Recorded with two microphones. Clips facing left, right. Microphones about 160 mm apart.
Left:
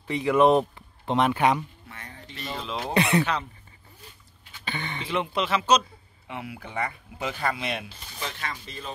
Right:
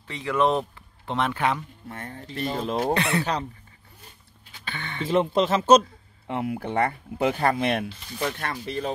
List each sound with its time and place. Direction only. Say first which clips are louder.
0.0 s speech: left 4 dB; 15° left (ahead or behind)
1.9 s speech: right 7 dB; 50° right (ahead or behind)
2.9 s speech: left 6 dB; 15° left (ahead or behind)
4.6 s speech: left 1 dB; 15° left (ahead or behind)
5.0 s speech: right 7 dB; 40° right (ahead or behind); by 8.9 s 65° right (ahead or behind)